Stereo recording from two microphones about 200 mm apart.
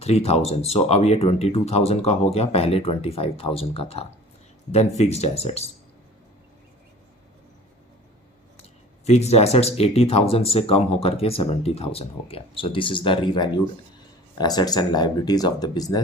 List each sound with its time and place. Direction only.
0.0 s speech: 30° left (ahead or behind)
9.0 s speech: 35° left (ahead or behind)